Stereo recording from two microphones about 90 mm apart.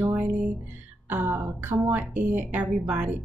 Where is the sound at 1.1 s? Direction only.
20° right (ahead or behind).